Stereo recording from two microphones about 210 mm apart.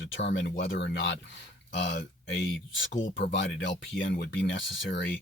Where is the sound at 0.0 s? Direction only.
60° left (ahead or behind).